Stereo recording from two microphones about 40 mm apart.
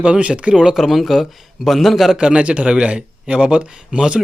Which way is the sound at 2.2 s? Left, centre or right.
Right.